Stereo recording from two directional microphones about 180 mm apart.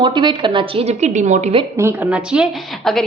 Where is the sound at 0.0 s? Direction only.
25° right (ahead or behind); by 1.5 s 40° right (ahead or behind).